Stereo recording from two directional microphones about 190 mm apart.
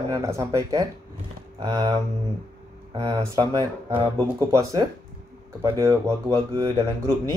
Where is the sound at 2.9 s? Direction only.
20° right (ahead or behind).